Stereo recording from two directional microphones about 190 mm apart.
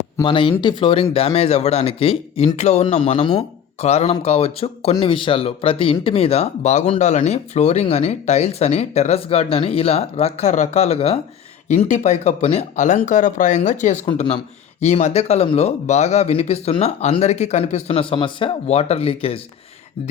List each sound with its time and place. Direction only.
0.2 s speech: 25° left (ahead or behind)